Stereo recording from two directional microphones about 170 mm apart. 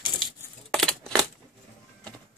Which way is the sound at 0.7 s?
Centre (ahead or behind).